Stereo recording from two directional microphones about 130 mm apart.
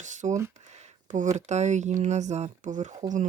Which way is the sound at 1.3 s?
60° right (ahead or behind).